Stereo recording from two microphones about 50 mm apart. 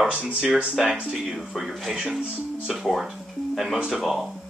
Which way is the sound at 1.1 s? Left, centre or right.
Centre.